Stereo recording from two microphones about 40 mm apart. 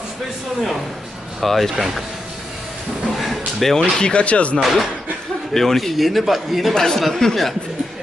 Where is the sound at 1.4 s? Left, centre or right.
Centre.